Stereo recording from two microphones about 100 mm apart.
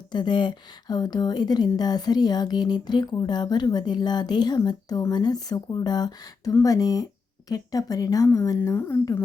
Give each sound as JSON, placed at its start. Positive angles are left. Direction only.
{"t": 0.1, "sound": "a woman's voice", "side_deg": 45}